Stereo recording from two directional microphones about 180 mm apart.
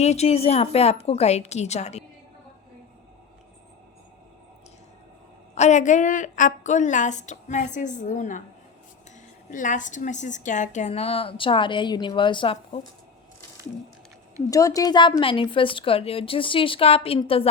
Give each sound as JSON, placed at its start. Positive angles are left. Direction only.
{"t": 0.0, "sound": "a woman's voice", "side_deg": 35}
{"t": 5.5, "sound": "a woman's voice", "side_deg": 40}
{"t": 9.5, "sound": "a woman's voice", "side_deg": 45}
{"t": 14.5, "sound": "speech", "side_deg": 20}